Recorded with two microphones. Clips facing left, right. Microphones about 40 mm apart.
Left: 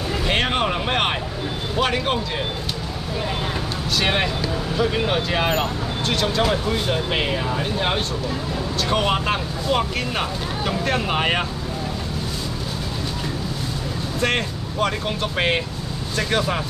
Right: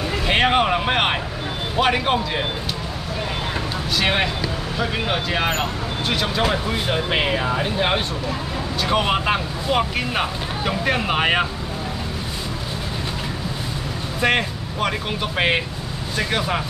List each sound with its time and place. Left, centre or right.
0.3 s speech: centre
3.9 s speech: centre
14.2 s speech: centre